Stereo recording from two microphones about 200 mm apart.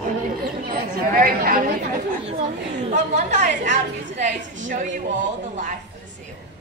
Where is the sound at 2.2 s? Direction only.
35° right (ahead or behind).